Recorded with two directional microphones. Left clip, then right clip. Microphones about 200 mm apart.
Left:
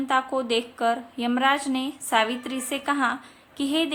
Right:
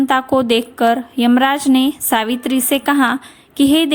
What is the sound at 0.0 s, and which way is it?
A woman's voice, 40° right (ahead or behind).